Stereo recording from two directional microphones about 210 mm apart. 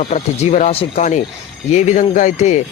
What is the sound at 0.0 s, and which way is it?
Speech, 30° left (ahead or behind).